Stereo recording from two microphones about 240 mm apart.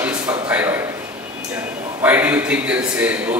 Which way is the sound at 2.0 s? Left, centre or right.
Centre.